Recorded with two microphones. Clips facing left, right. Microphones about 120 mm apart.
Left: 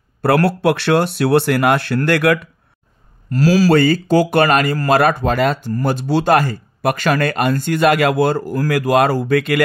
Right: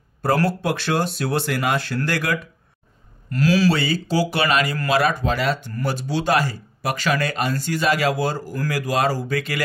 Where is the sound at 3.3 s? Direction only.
40° left (ahead or behind).